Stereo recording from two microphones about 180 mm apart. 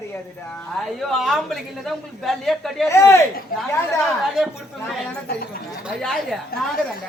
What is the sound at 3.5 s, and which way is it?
Speech, 55° left (ahead or behind).